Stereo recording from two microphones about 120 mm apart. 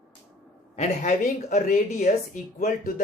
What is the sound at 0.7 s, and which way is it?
Speech, 80° left.